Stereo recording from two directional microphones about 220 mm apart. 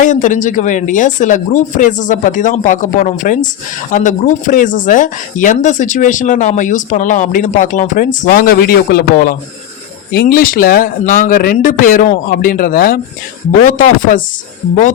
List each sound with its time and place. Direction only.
0.0 s speech: 35° left (ahead or behind)